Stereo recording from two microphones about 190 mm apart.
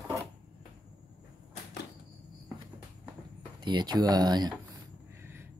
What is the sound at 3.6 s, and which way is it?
Speech, 20° right (ahead or behind).